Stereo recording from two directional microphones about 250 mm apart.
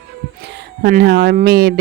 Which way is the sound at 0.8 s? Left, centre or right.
Right.